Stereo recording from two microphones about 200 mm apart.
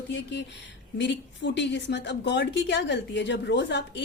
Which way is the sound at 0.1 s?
60° left (ahead or behind).